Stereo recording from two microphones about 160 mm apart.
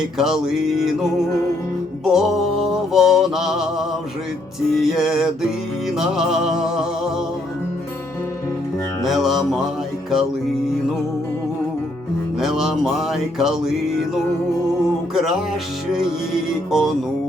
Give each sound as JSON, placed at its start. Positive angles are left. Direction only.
{"t": 0.0, "sound": "music", "side_deg": -5}
{"t": 2.0, "sound": "mantra", "side_deg": 0}
{"t": 4.7, "sound": "music", "side_deg": 0}
{"t": 9.0, "sound": "music", "side_deg": 0}
{"t": 12.4, "sound": "music", "side_deg": 0}
{"t": 15.1, "sound": "music", "side_deg": 0}